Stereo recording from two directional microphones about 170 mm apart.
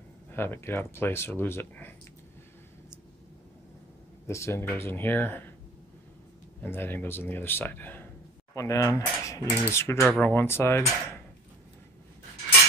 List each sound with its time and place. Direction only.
0.3 s speech: 15° left (ahead or behind)
4.3 s speech: 15° left (ahead or behind)
6.6 s speech: 10° left (ahead or behind)